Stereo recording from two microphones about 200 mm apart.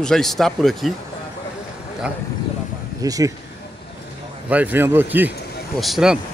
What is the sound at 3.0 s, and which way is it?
Speech, 15° right (ahead or behind).